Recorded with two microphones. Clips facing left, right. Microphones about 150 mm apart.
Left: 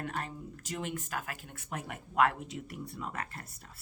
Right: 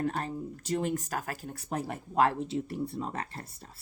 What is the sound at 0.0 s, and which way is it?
Speech, 35° right (ahead or behind).